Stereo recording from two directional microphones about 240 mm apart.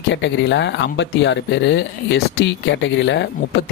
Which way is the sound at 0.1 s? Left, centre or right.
Left.